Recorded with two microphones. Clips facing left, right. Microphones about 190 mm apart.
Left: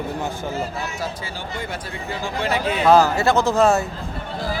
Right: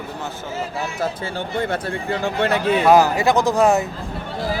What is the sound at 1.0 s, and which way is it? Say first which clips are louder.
Speech: right 5 dB; 55° right (ahead or behind).